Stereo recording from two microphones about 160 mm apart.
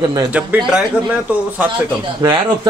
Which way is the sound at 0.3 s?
10° right (ahead or behind).